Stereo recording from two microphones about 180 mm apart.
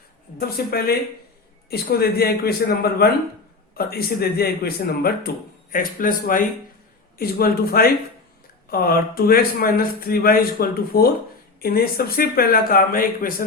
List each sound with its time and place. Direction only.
0.3 s a man's voice: 60° left (ahead or behind)